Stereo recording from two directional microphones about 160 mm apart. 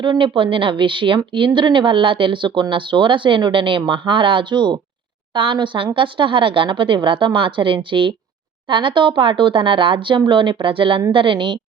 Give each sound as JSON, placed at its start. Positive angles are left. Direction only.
{"t": 0.0, "sound": "a woman's voice", "side_deg": -30}